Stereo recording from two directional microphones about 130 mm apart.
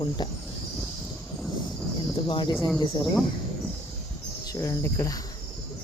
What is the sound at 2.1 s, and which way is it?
Speech, 40° left (ahead or behind).